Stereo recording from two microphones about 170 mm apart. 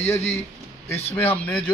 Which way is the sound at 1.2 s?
10° left (ahead or behind).